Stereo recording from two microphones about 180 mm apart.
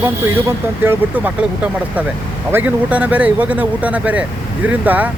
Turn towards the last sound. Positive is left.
turn(degrees=-10)  # may be behind; listen again after turning